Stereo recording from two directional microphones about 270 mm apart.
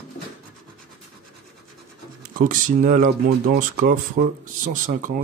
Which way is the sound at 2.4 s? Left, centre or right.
Right.